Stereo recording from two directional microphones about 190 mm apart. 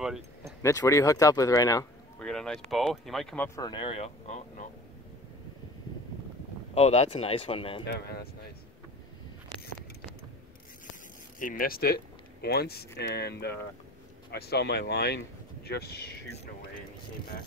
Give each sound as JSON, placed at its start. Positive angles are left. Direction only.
{"t": 0.6, "sound": "speech", "side_deg": 15}
{"t": 2.1, "sound": "speech", "side_deg": 5}
{"t": 3.4, "sound": "speech", "side_deg": 20}
{"t": 6.7, "sound": "speech", "side_deg": 35}
{"t": 7.8, "sound": "speech", "side_deg": 55}
{"t": 11.3, "sound": "speech", "side_deg": 45}